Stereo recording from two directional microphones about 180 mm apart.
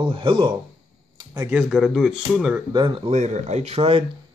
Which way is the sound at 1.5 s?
5° right (ahead or behind).